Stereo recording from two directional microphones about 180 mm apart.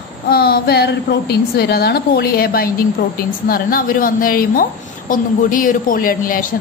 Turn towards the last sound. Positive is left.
turn(degrees=50)  # may be behind; listen again after turning